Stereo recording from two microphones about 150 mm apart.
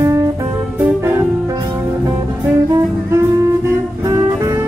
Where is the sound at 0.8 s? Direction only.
15° right (ahead or behind).